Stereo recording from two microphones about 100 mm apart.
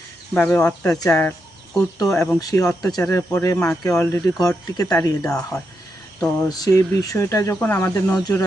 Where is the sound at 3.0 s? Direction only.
25° left (ahead or behind).